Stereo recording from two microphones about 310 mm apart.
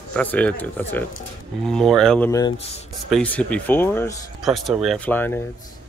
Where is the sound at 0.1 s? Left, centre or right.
Centre.